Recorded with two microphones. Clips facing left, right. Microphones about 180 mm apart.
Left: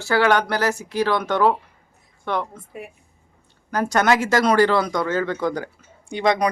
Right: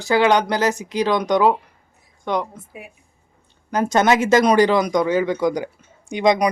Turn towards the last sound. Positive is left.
turn(degrees=-15)  # may be behind; listen again after turning